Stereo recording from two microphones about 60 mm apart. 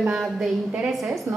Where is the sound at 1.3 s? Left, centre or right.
Right.